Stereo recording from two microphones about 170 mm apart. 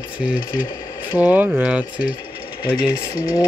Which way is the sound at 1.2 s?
10° right (ahead or behind).